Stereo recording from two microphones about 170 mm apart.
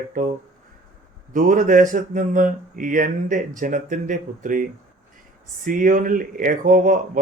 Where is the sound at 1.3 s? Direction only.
50° right (ahead or behind).